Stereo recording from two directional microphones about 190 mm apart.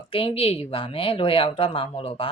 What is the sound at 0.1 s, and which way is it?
Speech, 30° left (ahead or behind).